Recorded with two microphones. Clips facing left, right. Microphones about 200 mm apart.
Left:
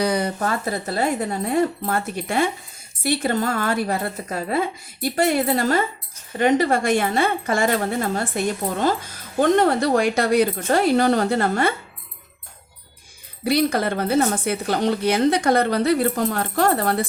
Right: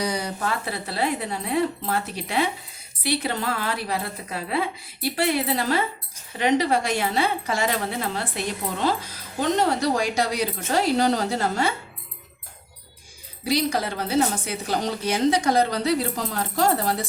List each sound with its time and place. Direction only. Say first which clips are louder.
0.0 s speech: left 5 dB; 55° left (ahead or behind)
13.4 s speech: left 4 dB; 55° left (ahead or behind)